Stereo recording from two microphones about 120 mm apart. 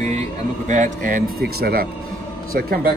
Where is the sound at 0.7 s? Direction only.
90° right.